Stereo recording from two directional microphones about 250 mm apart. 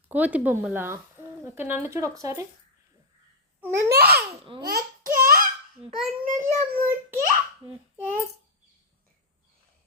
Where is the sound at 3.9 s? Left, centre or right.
Right.